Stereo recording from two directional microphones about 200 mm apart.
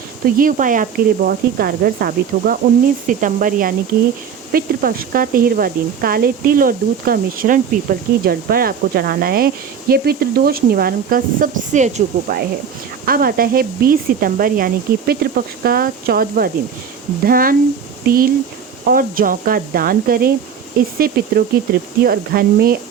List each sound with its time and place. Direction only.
0.3 s a woman's voice: 40° right (ahead or behind)